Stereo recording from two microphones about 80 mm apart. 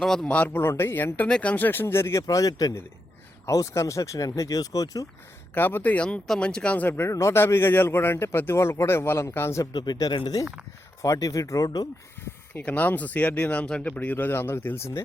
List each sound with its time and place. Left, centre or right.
0.0 s a man's voice: centre
0.3 s speech: centre
0.5 s speech: left
2.2 s speech: left
5.5 s speech: left
6.8 s a man's voice: left
9.7 s speech: left
11.0 s speech: left
12.5 s speech: left